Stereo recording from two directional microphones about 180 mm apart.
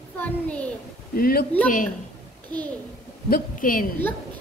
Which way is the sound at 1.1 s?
55° left (ahead or behind).